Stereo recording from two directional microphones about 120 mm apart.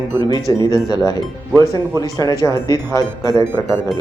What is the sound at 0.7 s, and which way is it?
Speech, 35° left (ahead or behind).